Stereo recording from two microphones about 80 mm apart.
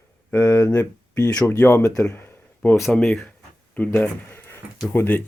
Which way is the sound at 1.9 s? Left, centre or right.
Left.